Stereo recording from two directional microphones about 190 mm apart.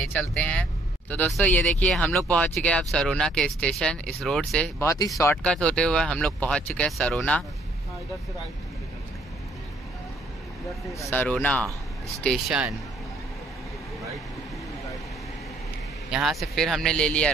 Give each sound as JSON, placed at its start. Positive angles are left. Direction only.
{"t": 0.1, "sound": "speech", "side_deg": 5}
{"t": 4.8, "sound": "speech", "side_deg": 20}
{"t": 5.4, "sound": "speech", "side_deg": 5}
{"t": 10.9, "sound": "speech", "side_deg": 15}
{"t": 16.1, "sound": "speech", "side_deg": 0}